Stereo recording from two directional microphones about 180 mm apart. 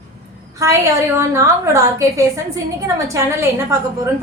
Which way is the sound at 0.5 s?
15° right (ahead or behind).